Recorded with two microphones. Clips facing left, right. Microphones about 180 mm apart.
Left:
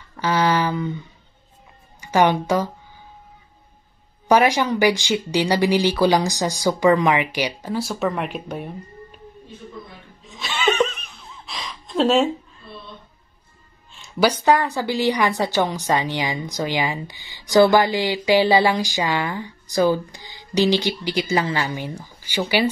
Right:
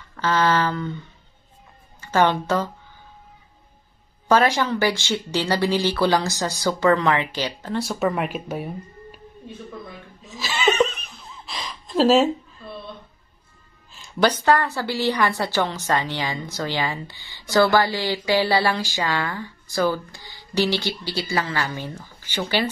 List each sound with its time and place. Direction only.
0.1 s a sound: 10° left (ahead or behind)
2.0 s speech: 15° left (ahead or behind)
4.3 s a woman's voice: 15° left (ahead or behind)
7.8 s speech: centre (ahead or behind)
10.2 s laughter: centre (ahead or behind)
13.9 s a woman's voice: 5° left (ahead or behind)